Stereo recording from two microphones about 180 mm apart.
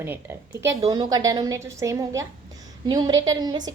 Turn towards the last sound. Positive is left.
turn(degrees=-25)  # may be behind; listen again after turning